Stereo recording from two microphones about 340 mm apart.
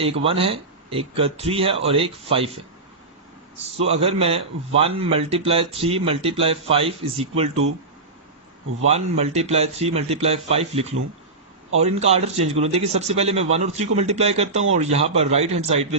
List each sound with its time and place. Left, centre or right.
0.0 s a man's voice: centre
3.8 s a man's voice: centre
8.8 s a man's voice: centre